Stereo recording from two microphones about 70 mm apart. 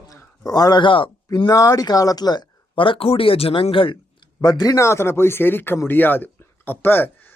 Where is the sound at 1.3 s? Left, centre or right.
Left.